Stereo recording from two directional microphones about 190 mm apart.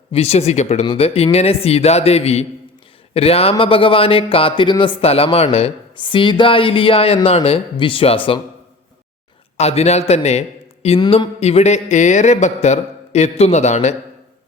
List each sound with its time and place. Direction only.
0.1 s speech: 30° left (ahead or behind)
9.6 s speech: 35° left (ahead or behind)